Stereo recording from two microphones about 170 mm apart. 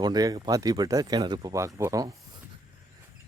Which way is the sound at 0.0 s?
25° right (ahead or behind).